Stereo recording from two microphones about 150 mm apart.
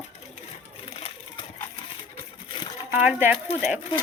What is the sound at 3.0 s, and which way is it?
Speech, 10° right (ahead or behind).